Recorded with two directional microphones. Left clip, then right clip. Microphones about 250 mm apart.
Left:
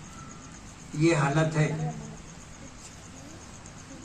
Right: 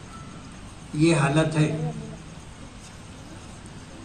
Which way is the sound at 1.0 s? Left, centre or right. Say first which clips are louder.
Right 3 dB; right.